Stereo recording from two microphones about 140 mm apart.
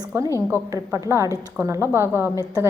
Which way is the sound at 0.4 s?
20° right (ahead or behind).